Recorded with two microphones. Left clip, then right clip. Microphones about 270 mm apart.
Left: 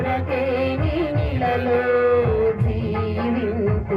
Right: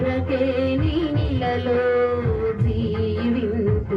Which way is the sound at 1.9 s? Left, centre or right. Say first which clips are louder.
Left 6 dB; left.